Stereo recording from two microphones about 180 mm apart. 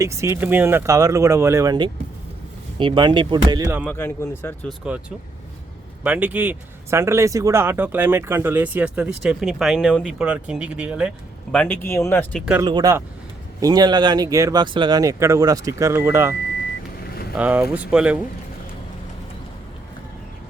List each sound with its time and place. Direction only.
0.0 s speech: 15° right (ahead or behind)
3.8 s speech: 15° left (ahead or behind)
6.0 s speech: 10° right (ahead or behind)
11.5 s speech: 10° left (ahead or behind)
12.6 s speech: 20° right (ahead or behind)
17.3 s speech: 10° right (ahead or behind)